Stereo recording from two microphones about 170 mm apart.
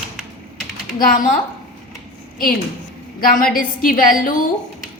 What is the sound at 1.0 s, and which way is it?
Speech, 50° left (ahead or behind).